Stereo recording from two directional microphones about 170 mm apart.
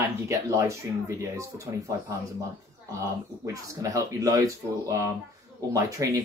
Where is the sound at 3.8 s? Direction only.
20° right (ahead or behind).